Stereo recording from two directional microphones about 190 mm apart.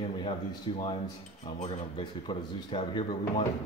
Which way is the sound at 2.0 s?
25° left (ahead or behind).